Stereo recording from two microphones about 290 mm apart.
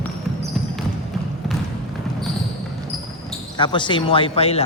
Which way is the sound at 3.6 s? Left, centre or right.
Centre.